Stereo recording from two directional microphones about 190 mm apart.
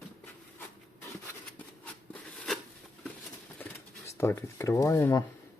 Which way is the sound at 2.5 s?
Centre (ahead or behind).